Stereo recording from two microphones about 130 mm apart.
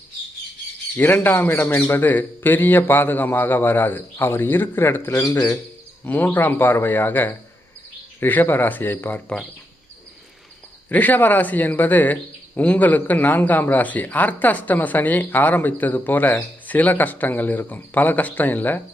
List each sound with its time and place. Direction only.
0.9 s speech: 15° left (ahead or behind)
6.1 s speech: 15° left (ahead or behind)
10.8 s speech: 15° left (ahead or behind)